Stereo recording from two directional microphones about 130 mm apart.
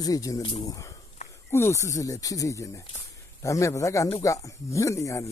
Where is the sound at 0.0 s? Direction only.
25° left (ahead or behind).